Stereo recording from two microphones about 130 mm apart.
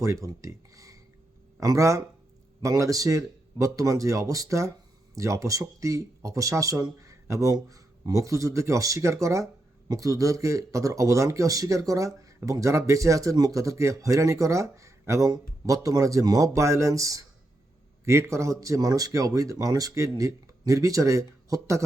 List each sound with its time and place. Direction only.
0.0 s speech: 25° right (ahead or behind)